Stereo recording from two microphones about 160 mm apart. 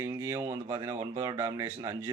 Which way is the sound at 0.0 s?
20° right (ahead or behind).